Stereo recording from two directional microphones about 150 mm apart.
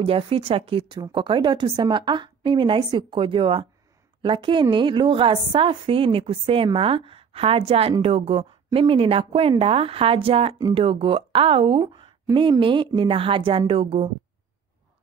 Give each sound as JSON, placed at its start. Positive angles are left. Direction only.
{"t": 0.0, "sound": "a woman's voice", "side_deg": -40}